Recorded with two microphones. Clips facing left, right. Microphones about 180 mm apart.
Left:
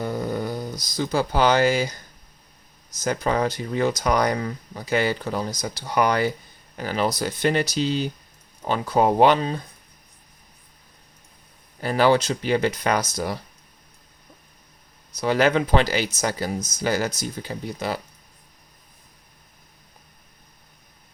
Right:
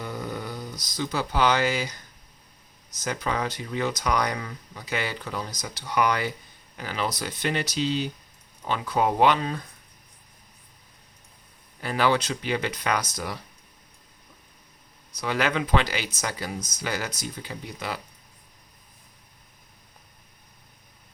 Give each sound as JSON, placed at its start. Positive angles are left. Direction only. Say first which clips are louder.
{"t": 0.0, "sound": "a sound", "louder": "left 7 dB", "side_deg": 40}
{"t": 0.9, "sound": "speech", "louder": "left 4 dB", "side_deg": 40}
{"t": 3.0, "sound": "speech", "louder": "left 6 dB", "side_deg": 40}
{"t": 11.8, "sound": "speech", "louder": "left 5 dB", "side_deg": 35}
{"t": 15.2, "sound": "speech", "louder": "left 6 dB", "side_deg": 35}